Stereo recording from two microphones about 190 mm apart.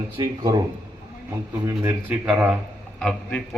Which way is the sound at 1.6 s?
10° right (ahead or behind).